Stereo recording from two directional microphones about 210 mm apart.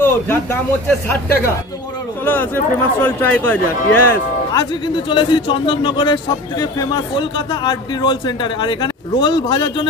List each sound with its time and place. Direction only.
0.0 s speech: 10° left (ahead or behind)
2.2 s speech: 10° left (ahead or behind)